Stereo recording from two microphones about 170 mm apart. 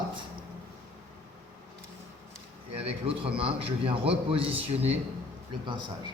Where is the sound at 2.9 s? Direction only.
35° right (ahead or behind).